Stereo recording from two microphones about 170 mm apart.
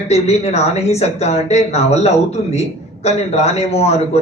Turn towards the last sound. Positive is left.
turn(degrees=40)  # may be behind; listen again after turning